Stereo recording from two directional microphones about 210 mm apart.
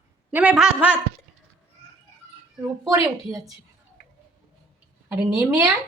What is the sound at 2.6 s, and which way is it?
Speech, 15° right (ahead or behind).